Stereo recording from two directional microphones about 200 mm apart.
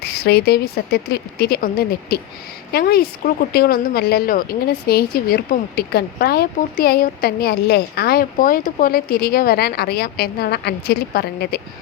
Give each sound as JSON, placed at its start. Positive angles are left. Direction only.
{"t": 0.0, "sound": "speech", "side_deg": 55}